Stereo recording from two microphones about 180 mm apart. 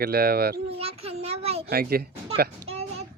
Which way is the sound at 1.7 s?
60° right (ahead or behind).